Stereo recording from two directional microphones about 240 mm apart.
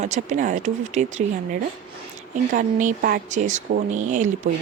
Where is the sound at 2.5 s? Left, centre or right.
Right.